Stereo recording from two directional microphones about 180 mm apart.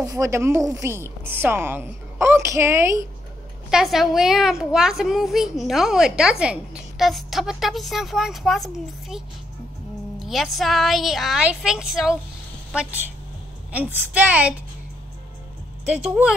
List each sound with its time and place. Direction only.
0.0 s a woman's voice: 20° right (ahead or behind)
3.7 s a woman's voice: centre (ahead or behind)
13.7 s a woman's voice: 10° right (ahead or behind)
15.8 s a woman's voice: 5° right (ahead or behind)